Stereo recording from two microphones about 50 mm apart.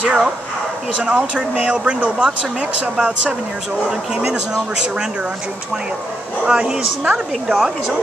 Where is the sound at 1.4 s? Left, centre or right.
Right.